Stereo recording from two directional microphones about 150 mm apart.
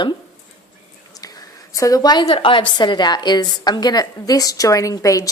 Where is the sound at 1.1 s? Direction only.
25° left (ahead or behind).